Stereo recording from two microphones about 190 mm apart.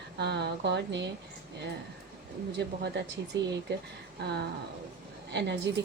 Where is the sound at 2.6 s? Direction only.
60° right (ahead or behind).